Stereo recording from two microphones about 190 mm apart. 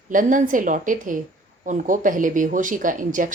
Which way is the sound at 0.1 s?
45° right (ahead or behind).